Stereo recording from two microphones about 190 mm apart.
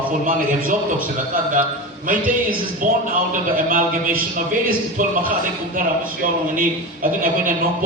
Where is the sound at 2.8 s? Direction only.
45° right (ahead or behind).